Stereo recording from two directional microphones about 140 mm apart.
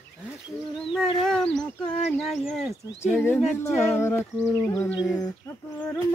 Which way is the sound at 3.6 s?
20° left (ahead or behind).